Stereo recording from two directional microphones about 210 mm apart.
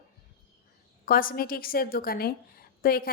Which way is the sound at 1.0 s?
45° left (ahead or behind).